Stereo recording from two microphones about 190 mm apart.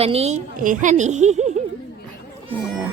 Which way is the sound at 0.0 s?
35° right (ahead or behind).